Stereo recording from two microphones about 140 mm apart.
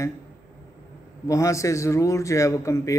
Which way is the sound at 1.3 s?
20° left (ahead or behind).